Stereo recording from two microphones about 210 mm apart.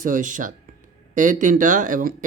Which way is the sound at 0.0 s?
40° right (ahead or behind).